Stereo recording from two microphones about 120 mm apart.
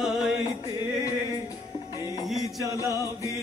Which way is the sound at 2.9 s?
25° left (ahead or behind).